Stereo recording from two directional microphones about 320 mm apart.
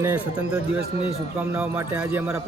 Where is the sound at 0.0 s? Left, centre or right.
Centre.